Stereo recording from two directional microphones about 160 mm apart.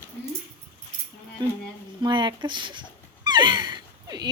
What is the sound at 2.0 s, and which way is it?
Speech, 30° right (ahead or behind).